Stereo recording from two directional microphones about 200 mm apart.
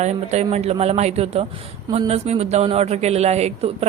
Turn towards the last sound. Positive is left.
turn(degrees=-30)  # may be behind; listen again after turning